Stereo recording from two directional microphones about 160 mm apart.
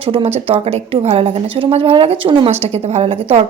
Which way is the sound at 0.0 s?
35° right (ahead or behind).